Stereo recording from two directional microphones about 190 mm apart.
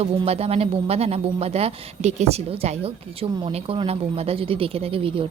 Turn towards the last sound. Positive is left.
turn(degrees=-30)  # may be behind; listen again after turning